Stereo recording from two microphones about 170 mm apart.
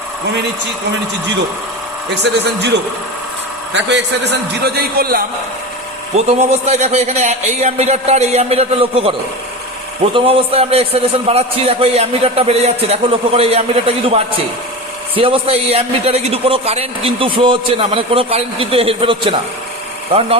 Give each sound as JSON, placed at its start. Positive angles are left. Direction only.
{"t": 2.2, "sound": "a man's voice", "side_deg": -85}
{"t": 6.1, "sound": "a man's voice", "side_deg": -40}
{"t": 10.2, "sound": "a man's voice", "side_deg": -35}